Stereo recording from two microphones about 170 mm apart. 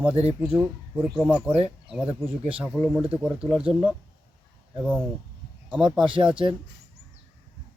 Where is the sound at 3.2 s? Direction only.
5° right (ahead or behind).